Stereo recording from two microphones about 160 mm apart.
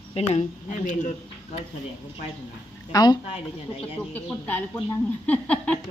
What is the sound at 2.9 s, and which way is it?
Speech, 25° left (ahead or behind).